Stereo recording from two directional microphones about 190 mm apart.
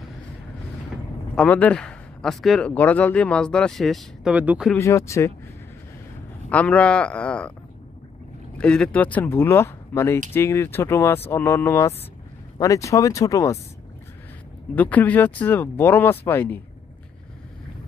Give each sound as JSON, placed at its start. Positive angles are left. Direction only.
{"t": 1.3, "sound": "speech", "side_deg": 5}
{"t": 4.7, "sound": "speech", "side_deg": 15}
{"t": 6.5, "sound": "speech", "side_deg": 5}
{"t": 8.5, "sound": "speech", "side_deg": 5}
{"t": 14.8, "sound": "speech", "side_deg": 10}